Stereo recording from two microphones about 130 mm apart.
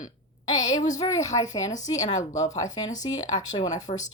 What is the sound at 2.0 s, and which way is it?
Speech, 70° left (ahead or behind).